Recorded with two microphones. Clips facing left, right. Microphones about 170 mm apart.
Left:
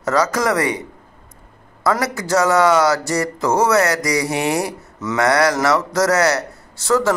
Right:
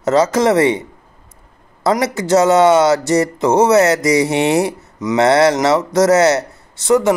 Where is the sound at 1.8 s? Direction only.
25° right (ahead or behind).